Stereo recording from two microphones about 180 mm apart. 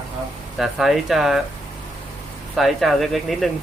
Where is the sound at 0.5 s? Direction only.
Centre (ahead or behind).